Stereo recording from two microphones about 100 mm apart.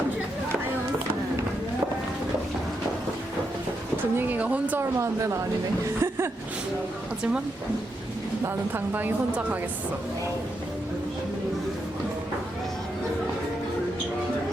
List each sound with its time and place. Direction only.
3.9 s a sound: 15° right (ahead or behind)
4.8 s speech: 30° right (ahead or behind)
8.7 s a woman's voice: 20° right (ahead or behind)